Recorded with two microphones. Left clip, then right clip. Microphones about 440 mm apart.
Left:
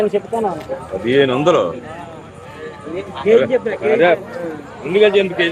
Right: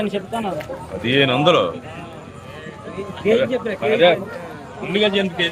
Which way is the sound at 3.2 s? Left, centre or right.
Right.